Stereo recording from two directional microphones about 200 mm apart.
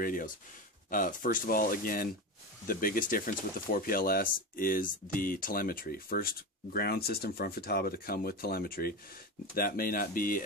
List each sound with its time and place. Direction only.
0.0 s speech: 45° left (ahead or behind)